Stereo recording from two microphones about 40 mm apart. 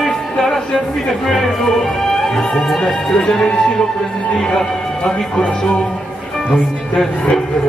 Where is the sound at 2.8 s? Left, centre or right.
Centre.